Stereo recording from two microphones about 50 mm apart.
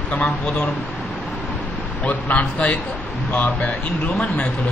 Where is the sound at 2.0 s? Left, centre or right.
Left.